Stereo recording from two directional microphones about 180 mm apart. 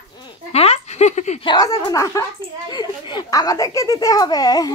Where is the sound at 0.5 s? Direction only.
35° left (ahead or behind).